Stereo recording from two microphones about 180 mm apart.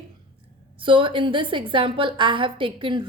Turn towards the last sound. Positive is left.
turn(degrees=-25)  # may be behind; listen again after turning